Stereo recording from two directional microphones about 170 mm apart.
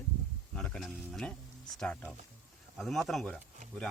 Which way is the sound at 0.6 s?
5° left (ahead or behind).